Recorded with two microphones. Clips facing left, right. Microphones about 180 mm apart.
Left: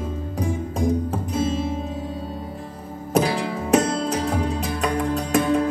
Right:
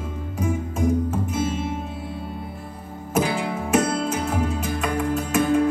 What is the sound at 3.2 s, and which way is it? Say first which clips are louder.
Music: left 2 dB; 35° left (ahead or behind).